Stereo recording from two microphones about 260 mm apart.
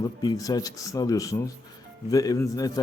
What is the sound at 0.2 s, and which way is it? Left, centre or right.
Speech, centre.